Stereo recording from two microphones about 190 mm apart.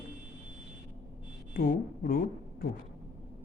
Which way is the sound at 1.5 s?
50° left (ahead or behind).